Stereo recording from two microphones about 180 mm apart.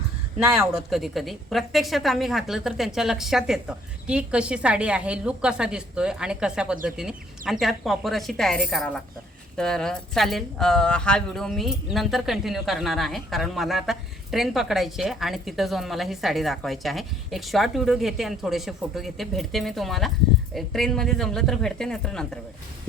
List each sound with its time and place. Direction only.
0.4 s speech: 15° right (ahead or behind)
0.7 s speech: centre (ahead or behind)